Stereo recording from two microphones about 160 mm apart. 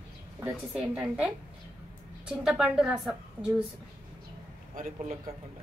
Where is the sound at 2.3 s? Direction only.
5° right (ahead or behind).